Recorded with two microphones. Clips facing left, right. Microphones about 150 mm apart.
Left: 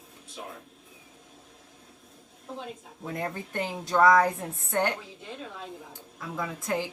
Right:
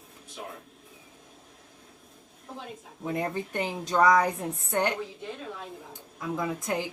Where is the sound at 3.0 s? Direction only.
20° right (ahead or behind).